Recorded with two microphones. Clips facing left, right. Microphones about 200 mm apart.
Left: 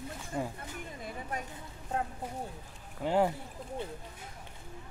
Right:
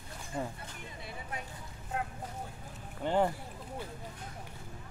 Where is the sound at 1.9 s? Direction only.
35° left (ahead or behind).